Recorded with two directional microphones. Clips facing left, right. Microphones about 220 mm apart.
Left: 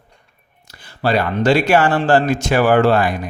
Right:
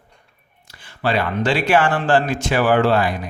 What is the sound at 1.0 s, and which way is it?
Speech, 40° left (ahead or behind).